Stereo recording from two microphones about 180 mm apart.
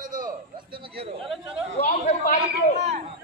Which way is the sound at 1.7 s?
40° left (ahead or behind).